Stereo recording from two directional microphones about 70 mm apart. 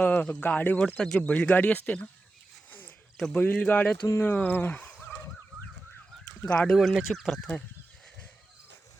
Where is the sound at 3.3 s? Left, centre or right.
Centre.